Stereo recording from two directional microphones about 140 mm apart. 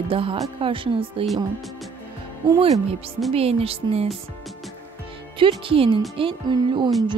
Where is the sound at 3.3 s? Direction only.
45° right (ahead or behind).